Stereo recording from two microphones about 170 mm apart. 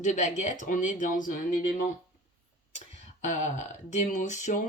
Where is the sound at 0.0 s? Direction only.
45° left (ahead or behind).